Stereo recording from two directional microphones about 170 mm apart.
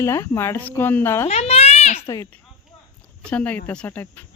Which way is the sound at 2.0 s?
15° left (ahead or behind).